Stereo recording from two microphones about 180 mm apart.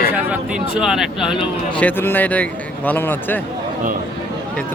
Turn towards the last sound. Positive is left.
turn(degrees=10)  # may be behind; listen again after turning